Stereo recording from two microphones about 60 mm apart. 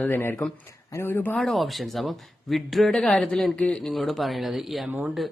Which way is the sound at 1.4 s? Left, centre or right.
Centre.